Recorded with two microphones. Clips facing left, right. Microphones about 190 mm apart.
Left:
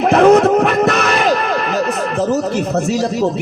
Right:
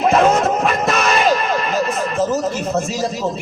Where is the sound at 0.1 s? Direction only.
65° left (ahead or behind).